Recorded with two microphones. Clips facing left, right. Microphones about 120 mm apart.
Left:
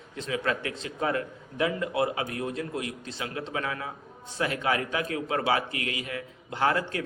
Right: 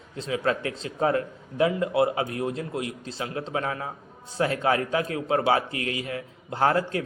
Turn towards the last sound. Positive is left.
turn(degrees=-30)  # may be behind; listen again after turning